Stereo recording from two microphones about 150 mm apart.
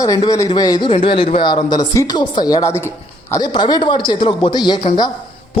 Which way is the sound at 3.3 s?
30° left (ahead or behind).